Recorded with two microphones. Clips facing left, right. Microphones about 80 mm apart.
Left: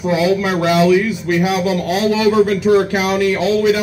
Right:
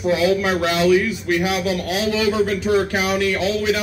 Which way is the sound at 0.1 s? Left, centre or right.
Centre.